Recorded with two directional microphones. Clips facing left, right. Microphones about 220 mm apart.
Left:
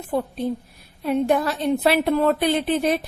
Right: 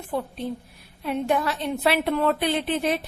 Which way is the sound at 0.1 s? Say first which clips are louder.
Left 5 dB; 40° left (ahead or behind).